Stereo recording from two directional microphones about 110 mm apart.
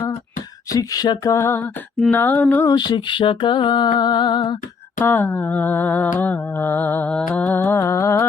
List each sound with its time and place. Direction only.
0.7 s speech: 35° left (ahead or behind)
1.3 s female singing: 25° left (ahead or behind)
2.0 s mantra: 15° left (ahead or behind)
2.6 s music: 40° left (ahead or behind)
4.9 s mantra: 20° left (ahead or behind)